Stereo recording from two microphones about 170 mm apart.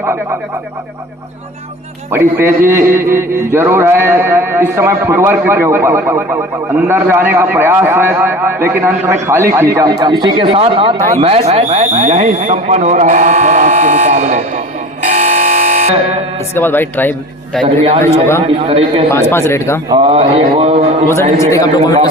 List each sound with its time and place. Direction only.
0.0 s a man's voice: 15° right (ahead or behind)
2.0 s a man's voice: 15° right (ahead or behind); by 14.6 s 45° right (ahead or behind)
15.0 s buzzer: 45° right (ahead or behind)
16.6 s speech: 10° left (ahead or behind)
18.4 s speech: 35° right (ahead or behind)
19.1 s speech: 15° left (ahead or behind)
19.9 s speech: 35° right (ahead or behind)
21.5 s a man's voice: 20° left (ahead or behind)